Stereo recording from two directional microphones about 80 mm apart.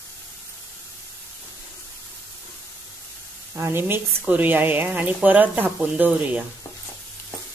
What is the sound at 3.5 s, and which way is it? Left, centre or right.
A woman's voice, right.